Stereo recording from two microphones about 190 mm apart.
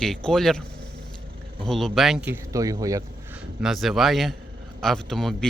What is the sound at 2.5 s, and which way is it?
Speech, 20° right (ahead or behind).